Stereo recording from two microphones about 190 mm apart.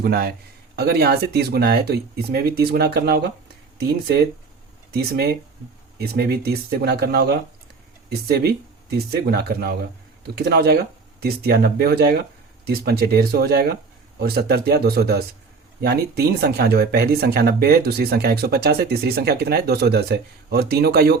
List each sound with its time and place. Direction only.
0.0 s a man's voice: 55° right (ahead or behind)